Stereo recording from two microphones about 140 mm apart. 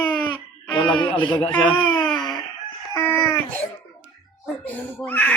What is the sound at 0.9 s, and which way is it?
Speech, 35° left (ahead or behind).